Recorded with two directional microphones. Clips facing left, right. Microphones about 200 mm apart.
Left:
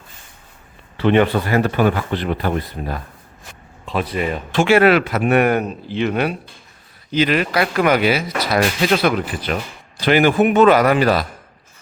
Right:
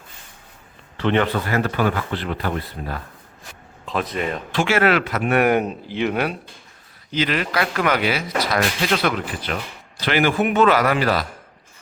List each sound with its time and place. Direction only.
0.9 s speech: 15° left (ahead or behind)
4.1 s speech: 5° left (ahead or behind)
4.5 s speech: 20° left (ahead or behind)
5.4 s speech: 15° right (ahead or behind)
7.1 s speech: 15° left (ahead or behind)